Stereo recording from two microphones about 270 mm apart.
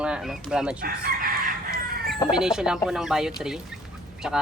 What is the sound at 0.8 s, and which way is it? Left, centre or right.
Chicken, right.